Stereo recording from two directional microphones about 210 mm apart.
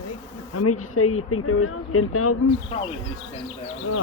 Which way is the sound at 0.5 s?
90° left.